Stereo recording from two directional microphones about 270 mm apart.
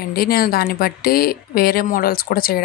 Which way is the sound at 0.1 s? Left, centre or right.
Left.